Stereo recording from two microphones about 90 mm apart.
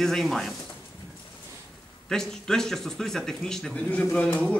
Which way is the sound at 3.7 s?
15° left (ahead or behind).